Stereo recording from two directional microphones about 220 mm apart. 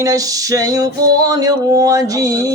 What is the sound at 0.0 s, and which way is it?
Male singing, 15° right (ahead or behind).